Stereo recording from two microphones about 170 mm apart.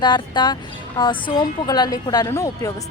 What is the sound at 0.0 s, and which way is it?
A woman's voice, 25° left (ahead or behind).